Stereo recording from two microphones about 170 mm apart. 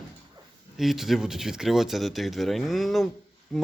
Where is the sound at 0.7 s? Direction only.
Centre (ahead or behind).